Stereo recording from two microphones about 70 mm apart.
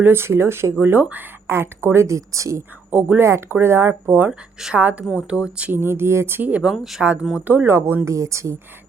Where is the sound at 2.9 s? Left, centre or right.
Right.